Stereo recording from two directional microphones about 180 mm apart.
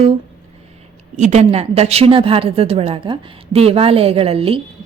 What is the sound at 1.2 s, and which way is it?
A woman's voice, 40° right (ahead or behind).